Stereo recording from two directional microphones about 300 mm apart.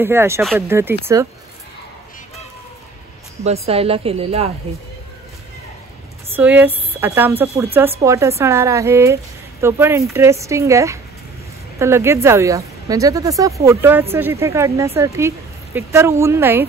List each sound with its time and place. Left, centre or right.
0.0 s speech: centre
3.4 s speech: centre
6.3 s speech: centre